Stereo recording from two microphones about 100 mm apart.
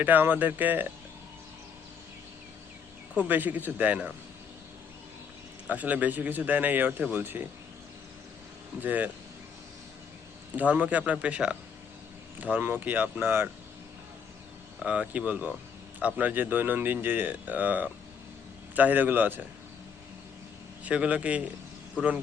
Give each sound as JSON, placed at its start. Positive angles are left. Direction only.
{"t": 0.0, "sound": "speech", "side_deg": -20}
{"t": 3.2, "sound": "speech", "side_deg": -20}
{"t": 5.6, "sound": "speech", "side_deg": -15}
{"t": 8.8, "sound": "speech", "side_deg": -15}
{"t": 10.5, "sound": "speech", "side_deg": -15}
{"t": 14.8, "sound": "speech", "side_deg": -10}
{"t": 20.8, "sound": "speech", "side_deg": -10}